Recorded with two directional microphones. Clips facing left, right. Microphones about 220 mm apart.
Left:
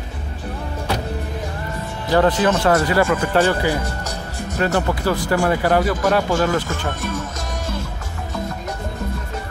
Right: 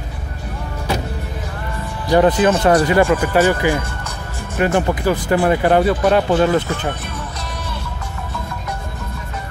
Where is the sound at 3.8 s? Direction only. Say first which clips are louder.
Left 2 dB; 40° left (ahead or behind).